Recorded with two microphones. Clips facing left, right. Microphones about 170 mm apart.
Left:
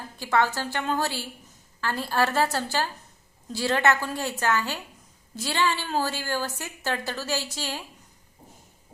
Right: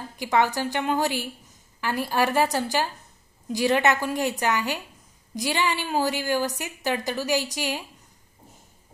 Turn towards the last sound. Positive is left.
turn(degrees=-15)  # may be behind; listen again after turning